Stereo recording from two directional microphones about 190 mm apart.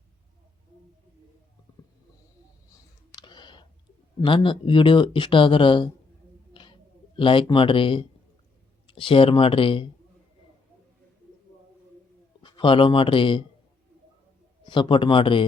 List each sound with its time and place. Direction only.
3.2 s a sound: 25° left (ahead or behind)
4.2 s speech: 25° left (ahead or behind)
6.5 s a sound: 25° left (ahead or behind)
7.2 s speech: 25° left (ahead or behind)
12.4 s speech: 25° left (ahead or behind)
14.6 s speech: 25° left (ahead or behind)